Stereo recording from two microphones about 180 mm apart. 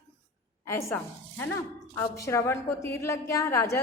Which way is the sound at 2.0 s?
15° left (ahead or behind).